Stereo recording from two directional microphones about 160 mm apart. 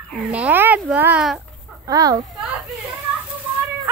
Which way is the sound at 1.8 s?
20° right (ahead or behind).